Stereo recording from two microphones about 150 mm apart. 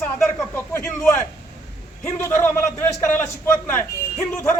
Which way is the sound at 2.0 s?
15° left (ahead or behind).